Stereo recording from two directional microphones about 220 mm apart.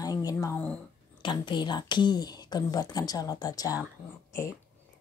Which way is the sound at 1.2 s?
20° left (ahead or behind).